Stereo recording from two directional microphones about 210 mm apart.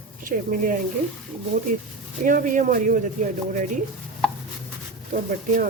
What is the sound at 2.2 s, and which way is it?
Speech, 40° right (ahead or behind).